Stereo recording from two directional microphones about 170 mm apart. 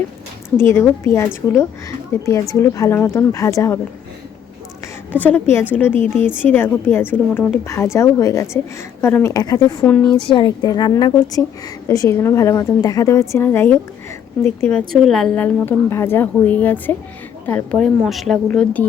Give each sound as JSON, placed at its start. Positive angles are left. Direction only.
{"t": 0.5, "sound": "a woman's voice", "side_deg": 15}
{"t": 5.1, "sound": "a woman's voice", "side_deg": 10}
{"t": 9.8, "sound": "a woman's voice", "side_deg": 5}
{"t": 10.2, "sound": "a woman's voice", "side_deg": 25}
{"t": 14.9, "sound": "a woman's voice", "side_deg": 0}